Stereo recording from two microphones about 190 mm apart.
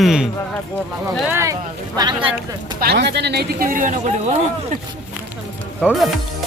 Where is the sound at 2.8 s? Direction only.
60° right (ahead or behind); by 4.0 s 45° right (ahead or behind).